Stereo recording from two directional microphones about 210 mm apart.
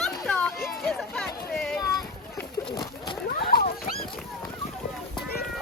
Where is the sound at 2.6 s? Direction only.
20° left (ahead or behind).